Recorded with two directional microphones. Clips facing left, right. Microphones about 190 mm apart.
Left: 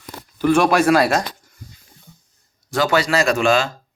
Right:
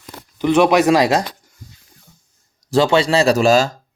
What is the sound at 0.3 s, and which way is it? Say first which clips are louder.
Speech: right 2 dB; 20° right (ahead or behind).